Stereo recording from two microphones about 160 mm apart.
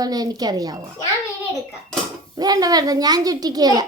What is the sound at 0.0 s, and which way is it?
Speech, 25° right (ahead or behind).